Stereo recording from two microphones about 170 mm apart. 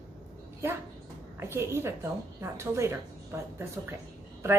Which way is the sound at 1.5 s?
15° right (ahead or behind).